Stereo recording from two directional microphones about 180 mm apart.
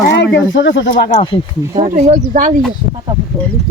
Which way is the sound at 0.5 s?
80° left.